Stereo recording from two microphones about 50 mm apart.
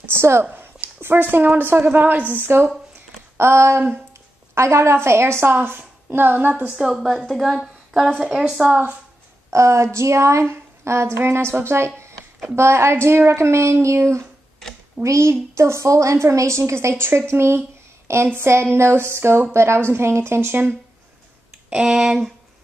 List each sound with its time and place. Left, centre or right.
0.0 s a woman's voice: right
3.3 s a woman's voice: right
6.8 s a woman's voice: centre
7.6 s a sound: centre
8.2 s speech: centre
8.6 s speech: right
9.5 s a woman's voice: right
13.3 s a woman's voice: right
17.3 s a woman's voice: right
21.6 s speech: centre